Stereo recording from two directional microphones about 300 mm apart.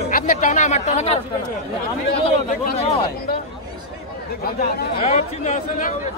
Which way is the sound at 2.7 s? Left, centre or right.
Left.